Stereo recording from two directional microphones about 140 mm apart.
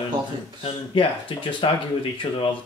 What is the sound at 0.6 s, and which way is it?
A man's voice, 40° left (ahead or behind).